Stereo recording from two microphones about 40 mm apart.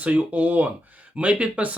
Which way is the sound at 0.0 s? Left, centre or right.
Right.